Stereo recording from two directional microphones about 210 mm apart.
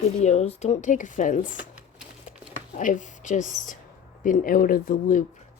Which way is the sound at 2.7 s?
35° left (ahead or behind).